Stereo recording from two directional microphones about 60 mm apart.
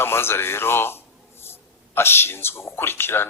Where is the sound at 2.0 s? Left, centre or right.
Left.